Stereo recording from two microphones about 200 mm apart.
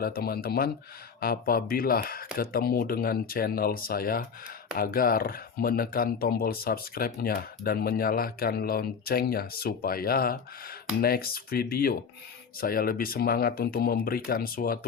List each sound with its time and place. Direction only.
0.0 s speech: 50° left (ahead or behind)